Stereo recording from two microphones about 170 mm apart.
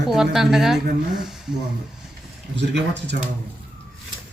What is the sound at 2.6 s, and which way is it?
Speech, 90° right.